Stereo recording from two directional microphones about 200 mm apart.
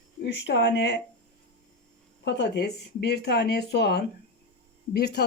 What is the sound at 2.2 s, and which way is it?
Speech, 60° left (ahead or behind).